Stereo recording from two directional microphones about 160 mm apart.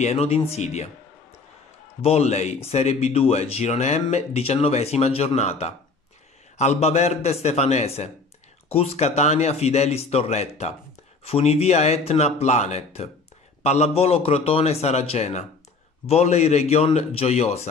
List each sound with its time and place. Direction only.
0.0 s speech: 40° left (ahead or behind)
2.0 s speech: 40° left (ahead or behind)